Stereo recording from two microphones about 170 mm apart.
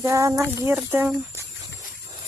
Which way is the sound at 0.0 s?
20° right (ahead or behind).